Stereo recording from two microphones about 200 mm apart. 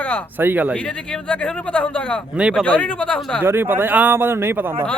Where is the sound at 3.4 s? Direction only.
10° right (ahead or behind).